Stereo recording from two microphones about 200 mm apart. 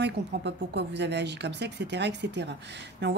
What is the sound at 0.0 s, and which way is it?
Speech, 60° right (ahead or behind).